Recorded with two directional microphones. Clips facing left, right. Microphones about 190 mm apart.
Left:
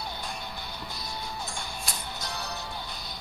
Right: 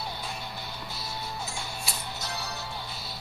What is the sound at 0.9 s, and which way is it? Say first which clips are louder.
Music: right 1 dB; 5° right (ahead or behind).